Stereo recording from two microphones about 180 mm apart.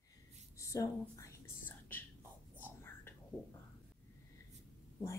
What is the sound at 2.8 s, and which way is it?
Whispering, 10° left (ahead or behind).